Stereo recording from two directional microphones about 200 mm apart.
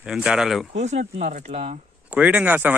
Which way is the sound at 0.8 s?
35° right (ahead or behind).